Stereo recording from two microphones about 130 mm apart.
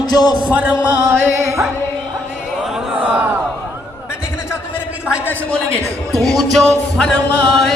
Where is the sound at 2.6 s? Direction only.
10° right (ahead or behind).